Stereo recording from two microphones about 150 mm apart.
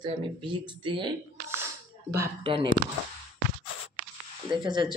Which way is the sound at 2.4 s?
35° right (ahead or behind).